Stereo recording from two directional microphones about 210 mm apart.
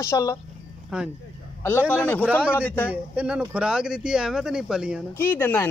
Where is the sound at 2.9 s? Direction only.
5° right (ahead or behind).